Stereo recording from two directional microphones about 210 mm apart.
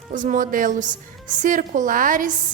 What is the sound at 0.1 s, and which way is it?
A woman's voice, 40° right (ahead or behind).